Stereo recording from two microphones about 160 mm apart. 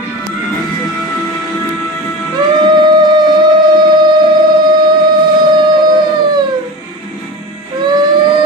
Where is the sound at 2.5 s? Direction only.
30° right (ahead or behind).